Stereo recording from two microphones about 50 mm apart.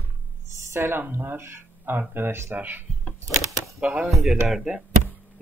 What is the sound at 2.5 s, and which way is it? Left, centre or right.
Speech, right.